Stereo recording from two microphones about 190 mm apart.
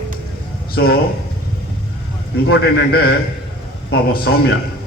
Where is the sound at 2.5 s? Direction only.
55° left (ahead or behind).